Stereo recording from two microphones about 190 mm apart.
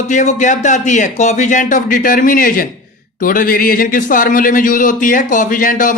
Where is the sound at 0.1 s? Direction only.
40° left (ahead or behind).